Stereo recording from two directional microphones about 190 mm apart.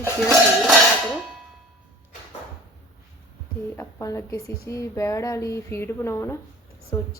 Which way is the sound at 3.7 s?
15° left (ahead or behind).